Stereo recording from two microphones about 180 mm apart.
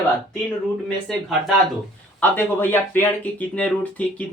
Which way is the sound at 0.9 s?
5° left (ahead or behind).